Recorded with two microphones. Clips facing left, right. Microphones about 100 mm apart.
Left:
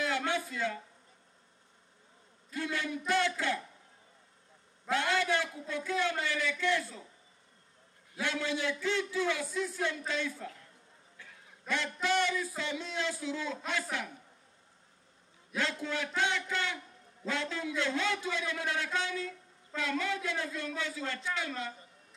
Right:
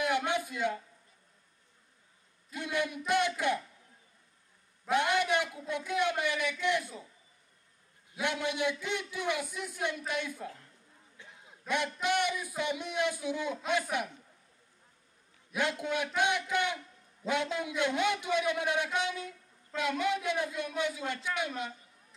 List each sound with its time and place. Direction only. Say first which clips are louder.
0.0 s a sound: right 2 dB; 15° right (ahead or behind)
2.5 s a man's voice: right 2 dB; 15° right (ahead or behind)
4.8 s a man's voice: right 2 dB; 15° right (ahead or behind)
8.2 s a man's voice: right 2 dB; 15° right (ahead or behind)
11.1 s a sound: right 1 dB; 20° right (ahead or behind)
11.6 s a man's voice: right 2 dB; 15° right (ahead or behind)
15.5 s a man's voice: right 2 dB; 15° right (ahead or behind)